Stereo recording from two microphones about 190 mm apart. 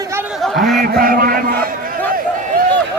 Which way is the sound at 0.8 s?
50° right (ahead or behind).